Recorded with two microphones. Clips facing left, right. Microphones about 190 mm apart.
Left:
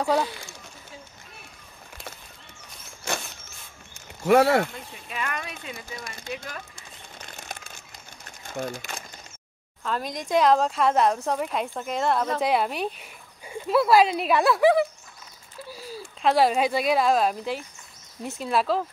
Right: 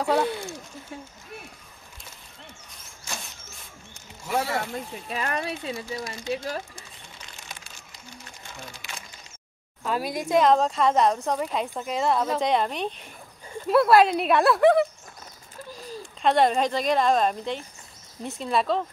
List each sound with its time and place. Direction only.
0.0 s speech: centre (ahead or behind)
3.1 s dog: 65° left (ahead or behind)
4.2 s speech: 65° left (ahead or behind)
4.7 s speech: 35° right (ahead or behind)
7.2 s crumpling: 50° left (ahead or behind)
8.5 s speech: 50° left (ahead or behind)
9.8 s speech: 5° right (ahead or behind)